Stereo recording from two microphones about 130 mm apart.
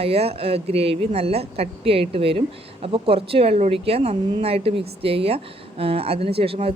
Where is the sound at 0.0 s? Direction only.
50° right (ahead or behind).